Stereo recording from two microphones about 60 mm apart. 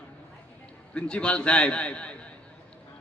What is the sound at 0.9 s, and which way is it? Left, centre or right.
A man's voice, centre.